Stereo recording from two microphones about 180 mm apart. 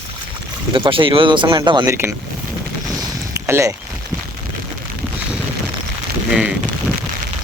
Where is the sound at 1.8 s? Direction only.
15° right (ahead or behind).